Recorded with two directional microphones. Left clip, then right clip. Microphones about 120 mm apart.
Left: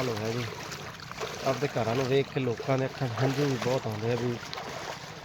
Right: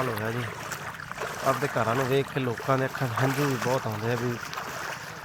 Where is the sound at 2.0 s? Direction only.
10° right (ahead or behind).